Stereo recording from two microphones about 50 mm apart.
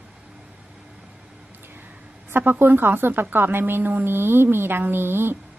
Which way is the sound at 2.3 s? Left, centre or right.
Right.